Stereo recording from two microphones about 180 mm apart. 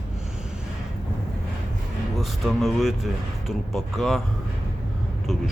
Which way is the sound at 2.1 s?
Centre (ahead or behind).